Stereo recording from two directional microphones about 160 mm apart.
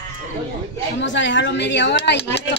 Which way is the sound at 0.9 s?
90° left.